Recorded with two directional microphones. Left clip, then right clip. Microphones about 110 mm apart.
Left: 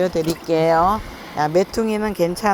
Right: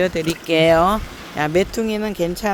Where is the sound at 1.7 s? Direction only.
10° right (ahead or behind).